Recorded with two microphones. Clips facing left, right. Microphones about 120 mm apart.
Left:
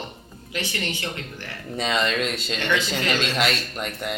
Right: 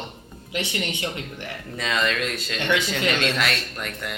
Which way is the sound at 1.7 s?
25° left (ahead or behind).